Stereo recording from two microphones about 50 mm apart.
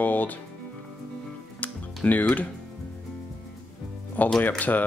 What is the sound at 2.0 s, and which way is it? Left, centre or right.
Speech, left.